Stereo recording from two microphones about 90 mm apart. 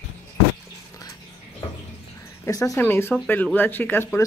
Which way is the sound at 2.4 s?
35° left (ahead or behind).